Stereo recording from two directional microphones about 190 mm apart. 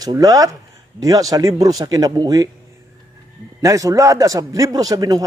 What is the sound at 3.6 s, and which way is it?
A man's voice, 15° right (ahead or behind).